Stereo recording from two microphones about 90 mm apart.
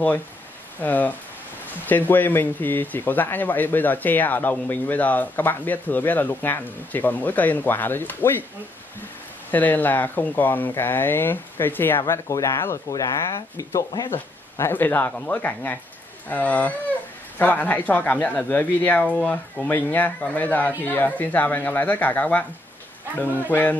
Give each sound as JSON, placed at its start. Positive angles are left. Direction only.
{"t": 0.7, "sound": "speech", "side_deg": 20}
{"t": 9.5, "sound": "speech", "side_deg": 20}
{"t": 12.1, "sound": "speech", "side_deg": 35}
{"t": 14.1, "sound": "speech", "side_deg": 20}
{"t": 23.5, "sound": "speech", "side_deg": 20}